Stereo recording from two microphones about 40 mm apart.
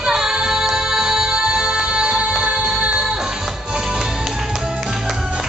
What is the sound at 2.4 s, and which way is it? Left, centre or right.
Music, right.